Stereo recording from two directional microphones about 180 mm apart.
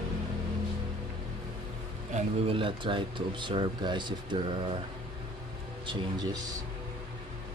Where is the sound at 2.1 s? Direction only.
30° right (ahead or behind).